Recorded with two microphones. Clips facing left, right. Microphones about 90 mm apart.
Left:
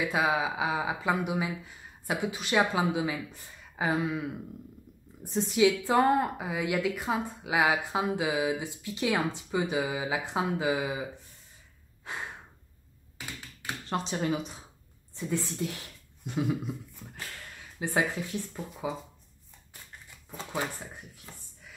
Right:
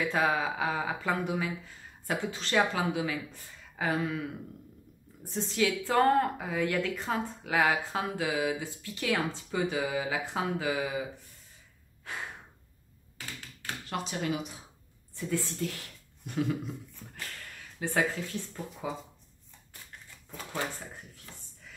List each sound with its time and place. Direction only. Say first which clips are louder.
0.0 s a woman's voice: left 1 dB; 10° left (ahead or behind)
12.1 s gasp: left 1 dB; 20° left (ahead or behind)
13.8 s speech: left 3 dB; 30° left (ahead or behind)
15.1 s a woman's voice: left 1 dB; 20° left (ahead or behind)